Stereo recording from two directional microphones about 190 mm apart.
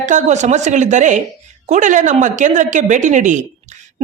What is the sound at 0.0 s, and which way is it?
A woman's voice, 40° right (ahead or behind).